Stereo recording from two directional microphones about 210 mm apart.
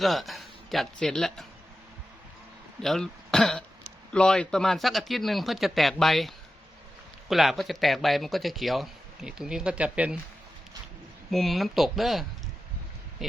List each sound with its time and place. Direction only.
0.0 s speech: centre (ahead or behind)
2.8 s speech: centre (ahead or behind)
11.3 s speech: centre (ahead or behind)